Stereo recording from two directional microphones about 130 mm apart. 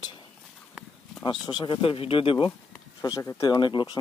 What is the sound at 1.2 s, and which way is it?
Speech, 35° left (ahead or behind).